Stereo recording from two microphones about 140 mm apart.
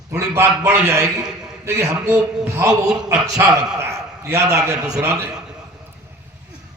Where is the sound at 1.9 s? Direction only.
5° right (ahead or behind); by 5.3 s 25° right (ahead or behind).